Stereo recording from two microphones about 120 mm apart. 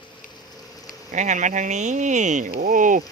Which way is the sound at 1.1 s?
85° right.